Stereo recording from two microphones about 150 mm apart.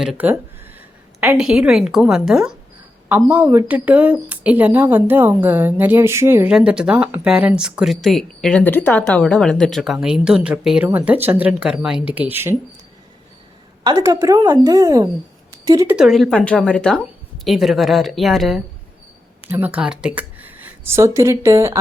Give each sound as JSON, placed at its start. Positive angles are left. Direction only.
{"t": 0.0, "sound": "a woman's voice", "side_deg": -10}
{"t": 13.8, "sound": "a woman's voice", "side_deg": -20}
{"t": 15.9, "sound": "speech", "side_deg": -5}
{"t": 19.5, "sound": "a woman's voice", "side_deg": -10}